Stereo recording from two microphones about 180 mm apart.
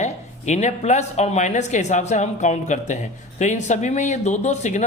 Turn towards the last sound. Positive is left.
turn(degrees=40)  # may be behind; listen again after turning